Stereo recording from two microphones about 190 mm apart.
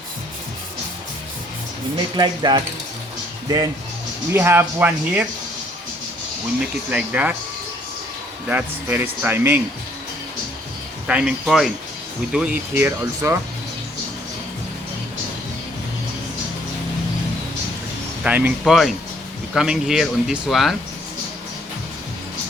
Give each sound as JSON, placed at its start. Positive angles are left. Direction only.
{"t": 2.1, "sound": "speech", "side_deg": -20}
{"t": 4.3, "sound": "speech", "side_deg": -10}
{"t": 6.9, "sound": "speech", "side_deg": -10}
{"t": 8.4, "sound": "speech", "side_deg": -10}
{"t": 11.0, "sound": "speech", "side_deg": -5}
{"t": 18.2, "sound": "speech", "side_deg": -10}